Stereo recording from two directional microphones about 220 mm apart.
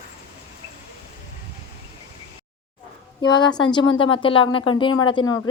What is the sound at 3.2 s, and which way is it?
Speech, 20° left (ahead or behind).